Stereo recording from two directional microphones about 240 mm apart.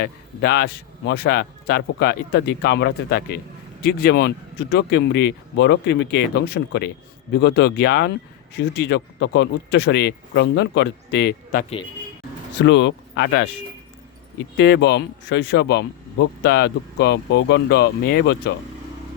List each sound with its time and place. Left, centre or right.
0.0 s a man's voice: left
12.6 s speech: left
14.5 s speech: left